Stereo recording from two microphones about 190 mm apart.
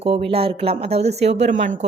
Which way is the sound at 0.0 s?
30° right (ahead or behind).